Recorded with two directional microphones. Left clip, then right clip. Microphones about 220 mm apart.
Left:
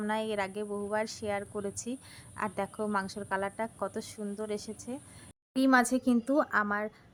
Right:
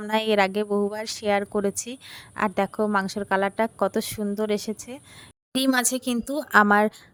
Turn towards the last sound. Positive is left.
turn(degrees=-45)  # may be behind; listen again after turning